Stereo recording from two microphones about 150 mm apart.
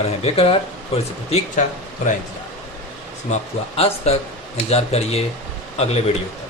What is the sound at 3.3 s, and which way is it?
Speech, 40° left (ahead or behind).